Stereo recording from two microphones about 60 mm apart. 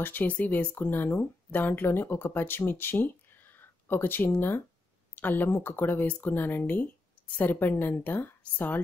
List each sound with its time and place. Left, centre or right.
0.0 s a woman's voice: left